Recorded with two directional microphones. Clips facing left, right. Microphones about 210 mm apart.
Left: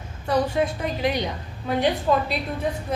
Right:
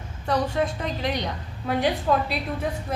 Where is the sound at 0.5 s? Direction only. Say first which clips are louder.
Left 2 dB; 5° left (ahead or behind).